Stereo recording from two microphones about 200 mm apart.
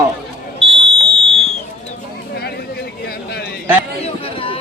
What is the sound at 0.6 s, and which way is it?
Fire alarm, centre (ahead or behind).